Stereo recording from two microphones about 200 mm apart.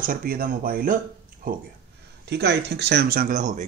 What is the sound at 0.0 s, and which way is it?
Speech, 45° right (ahead or behind).